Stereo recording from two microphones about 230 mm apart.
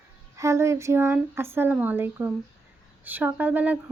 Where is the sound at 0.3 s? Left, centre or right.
Centre.